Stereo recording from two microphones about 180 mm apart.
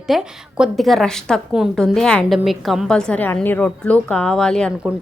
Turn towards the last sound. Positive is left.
turn(degrees=5)  # may be behind; listen again after turning